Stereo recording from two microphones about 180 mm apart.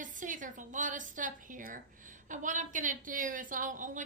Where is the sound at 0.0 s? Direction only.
45° right (ahead or behind).